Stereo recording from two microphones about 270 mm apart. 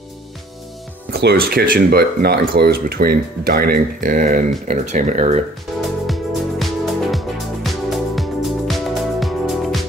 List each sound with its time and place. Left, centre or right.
1.1 s speech: right
6.0 s music: centre